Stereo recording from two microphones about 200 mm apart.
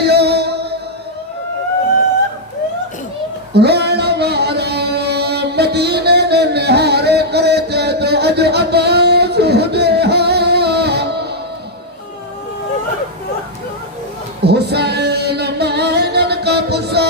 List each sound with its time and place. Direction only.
0.0 s music: 55° right (ahead or behind)
3.5 s music: 55° right (ahead or behind)
14.4 s music: 55° right (ahead or behind)